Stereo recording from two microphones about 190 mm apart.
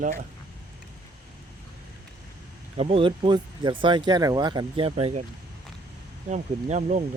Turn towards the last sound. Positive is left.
turn(degrees=-40)  # may be behind; listen again after turning